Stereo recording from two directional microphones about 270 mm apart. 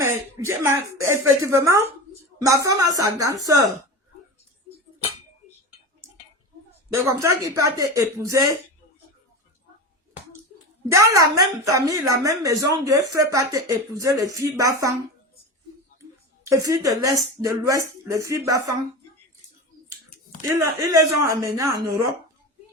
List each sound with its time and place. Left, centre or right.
0.4 s a woman's voice: centre
6.9 s a woman's voice: centre
10.9 s a woman's voice: centre
16.4 s a woman's voice: centre
20.6 s a woman's voice: centre